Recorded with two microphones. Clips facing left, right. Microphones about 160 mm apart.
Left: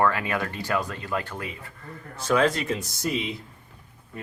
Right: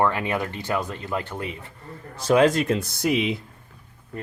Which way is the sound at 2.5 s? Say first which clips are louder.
Right 5 dB; 50° right (ahead or behind).